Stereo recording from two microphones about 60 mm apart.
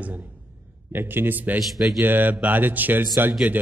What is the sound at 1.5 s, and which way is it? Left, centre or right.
Speech, centre.